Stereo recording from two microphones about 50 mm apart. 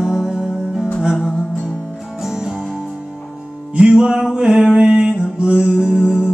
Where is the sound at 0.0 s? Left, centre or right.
Centre.